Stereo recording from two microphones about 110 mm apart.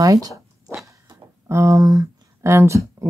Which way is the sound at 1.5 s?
25° right (ahead or behind).